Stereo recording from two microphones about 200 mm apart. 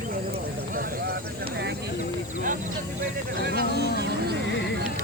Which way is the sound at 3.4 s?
50° right (ahead or behind).